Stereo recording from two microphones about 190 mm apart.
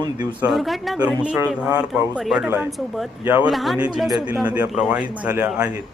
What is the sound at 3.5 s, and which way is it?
A woman's voice, centre (ahead or behind).